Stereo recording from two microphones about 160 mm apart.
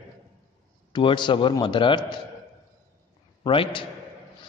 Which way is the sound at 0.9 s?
30° left (ahead or behind).